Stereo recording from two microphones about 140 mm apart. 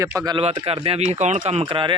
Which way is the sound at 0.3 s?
40° right (ahead or behind).